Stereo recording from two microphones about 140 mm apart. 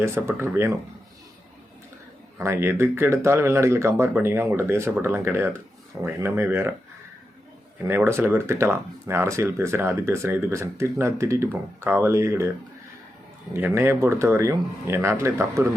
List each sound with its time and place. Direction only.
0.0 s speech: 20° right (ahead or behind)
2.4 s speech: 20° right (ahead or behind)
7.9 s speech: 15° right (ahead or behind)
13.5 s speech: 15° right (ahead or behind)